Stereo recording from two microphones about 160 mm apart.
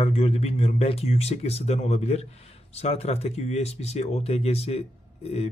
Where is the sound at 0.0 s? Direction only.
40° left (ahead or behind).